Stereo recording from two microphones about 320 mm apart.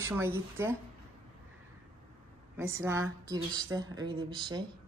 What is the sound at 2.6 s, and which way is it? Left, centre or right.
Speech, centre.